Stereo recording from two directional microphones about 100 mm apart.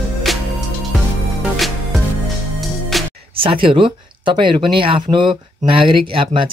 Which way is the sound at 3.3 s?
65° right (ahead or behind).